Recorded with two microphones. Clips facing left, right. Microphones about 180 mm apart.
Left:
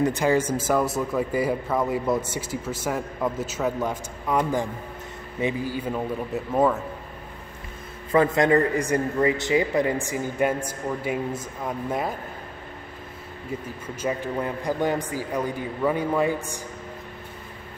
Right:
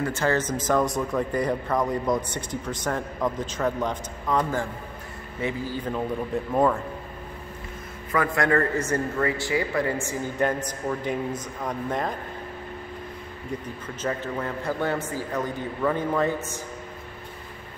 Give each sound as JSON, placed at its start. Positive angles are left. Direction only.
{"t": 0.0, "sound": "speech", "side_deg": 15}
{"t": 8.1, "sound": "a man's voice", "side_deg": 25}
{"t": 10.0, "sound": "speech", "side_deg": 10}
{"t": 14.0, "sound": "speech", "side_deg": 15}